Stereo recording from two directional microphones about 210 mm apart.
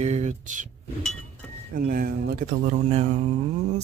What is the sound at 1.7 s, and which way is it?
Speech, 45° right (ahead or behind).